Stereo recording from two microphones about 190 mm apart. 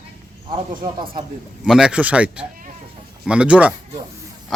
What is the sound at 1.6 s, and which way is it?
Speech, 5° right (ahead or behind).